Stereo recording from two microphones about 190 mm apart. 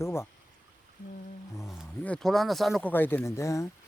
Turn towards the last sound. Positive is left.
turn(degrees=15)  # may be behind; listen again after turning